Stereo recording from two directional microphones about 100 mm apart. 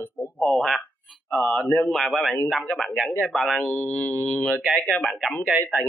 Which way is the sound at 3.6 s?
25° left (ahead or behind).